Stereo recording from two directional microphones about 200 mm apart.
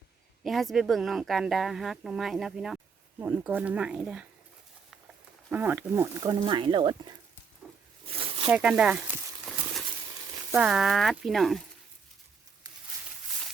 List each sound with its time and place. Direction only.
0.4 s speech: centre (ahead or behind)
5.5 s speech: 10° right (ahead or behind)
8.1 s zipper: 30° right (ahead or behind)
8.4 s speech: 5° right (ahead or behind)
10.5 s speech: 5° right (ahead or behind)
12.7 s a sound: 20° right (ahead or behind)